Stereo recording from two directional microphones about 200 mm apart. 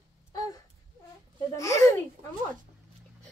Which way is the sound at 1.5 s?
15° left (ahead or behind).